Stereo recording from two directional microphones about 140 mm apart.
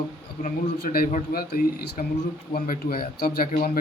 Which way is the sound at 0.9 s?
90° left.